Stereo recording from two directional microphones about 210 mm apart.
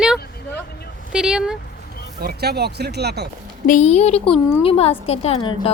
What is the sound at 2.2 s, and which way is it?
Speech, 50° right (ahead or behind).